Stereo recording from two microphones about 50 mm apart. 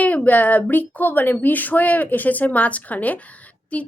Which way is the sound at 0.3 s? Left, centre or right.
Left.